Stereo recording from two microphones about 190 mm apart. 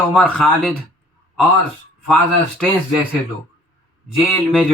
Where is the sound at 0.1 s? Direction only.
Centre (ahead or behind).